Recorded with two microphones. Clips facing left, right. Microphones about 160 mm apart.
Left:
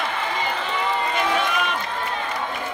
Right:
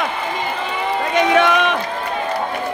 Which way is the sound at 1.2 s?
85° right.